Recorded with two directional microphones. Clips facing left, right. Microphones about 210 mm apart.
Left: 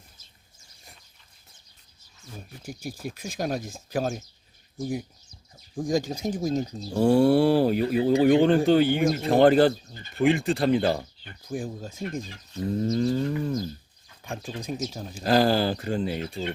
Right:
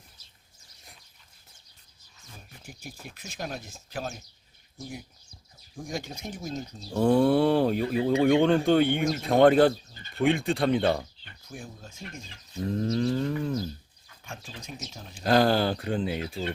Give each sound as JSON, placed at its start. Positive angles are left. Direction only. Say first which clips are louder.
{"t": 3.1, "sound": "speech", "louder": "left 7 dB", "side_deg": 40}
{"t": 5.7, "sound": "speech", "louder": "left 10 dB", "side_deg": 40}
{"t": 6.9, "sound": "speech", "louder": "left 2 dB", "side_deg": 10}
{"t": 11.4, "sound": "speech", "louder": "left 10 dB", "side_deg": 35}
{"t": 12.6, "sound": "speech", "louder": "left 2 dB", "side_deg": 5}
{"t": 12.9, "sound": "livestock", "louder": "left 2 dB", "side_deg": 0}
{"t": 14.4, "sound": "speech", "louder": "left 12 dB", "side_deg": 35}
{"t": 15.1, "sound": "speech", "louder": "left 1 dB", "side_deg": 0}